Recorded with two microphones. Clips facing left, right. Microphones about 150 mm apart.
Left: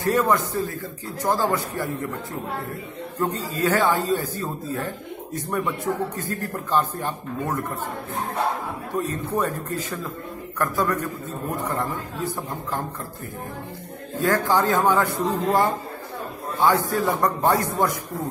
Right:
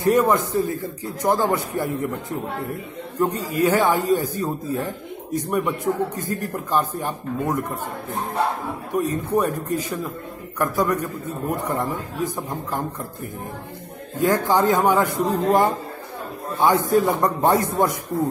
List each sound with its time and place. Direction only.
0.0 s a man's voice: 20° right (ahead or behind)
3.2 s a man's voice: 15° right (ahead or behind)
8.9 s a man's voice: 15° right (ahead or behind)
14.1 s a man's voice: 15° right (ahead or behind)